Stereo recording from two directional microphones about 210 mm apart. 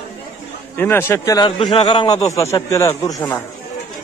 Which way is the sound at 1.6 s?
30° left (ahead or behind).